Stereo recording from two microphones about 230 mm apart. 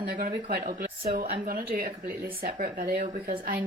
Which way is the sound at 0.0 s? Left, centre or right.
Right.